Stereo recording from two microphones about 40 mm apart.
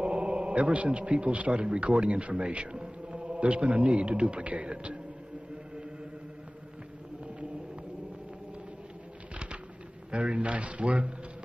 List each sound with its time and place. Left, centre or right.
0.0 s a man's voice: right
10.1 s a man's voice: right